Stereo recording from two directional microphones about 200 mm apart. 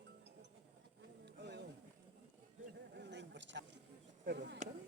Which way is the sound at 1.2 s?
60° right (ahead or behind).